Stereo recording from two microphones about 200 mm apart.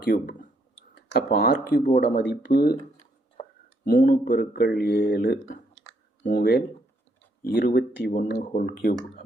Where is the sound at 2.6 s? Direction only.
45° left (ahead or behind).